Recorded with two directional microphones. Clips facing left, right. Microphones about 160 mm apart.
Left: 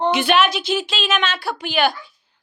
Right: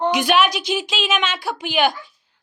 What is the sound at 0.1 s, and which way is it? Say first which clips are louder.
A woman's voice: left 1 dB; 10° right (ahead or behind).